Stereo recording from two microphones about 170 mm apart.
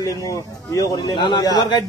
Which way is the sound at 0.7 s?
25° left (ahead or behind).